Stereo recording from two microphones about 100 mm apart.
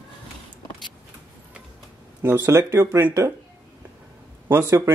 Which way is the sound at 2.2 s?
25° right (ahead or behind).